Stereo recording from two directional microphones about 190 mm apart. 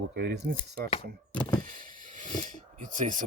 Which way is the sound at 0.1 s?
55° right (ahead or behind).